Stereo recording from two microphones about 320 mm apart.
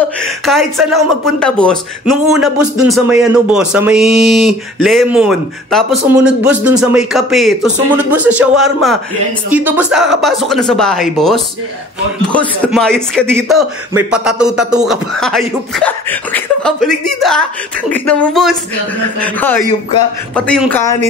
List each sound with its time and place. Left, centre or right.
0.2 s speech: centre